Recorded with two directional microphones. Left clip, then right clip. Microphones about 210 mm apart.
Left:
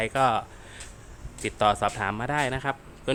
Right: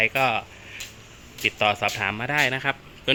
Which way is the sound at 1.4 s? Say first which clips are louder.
Right 1 dB; 15° left (ahead or behind).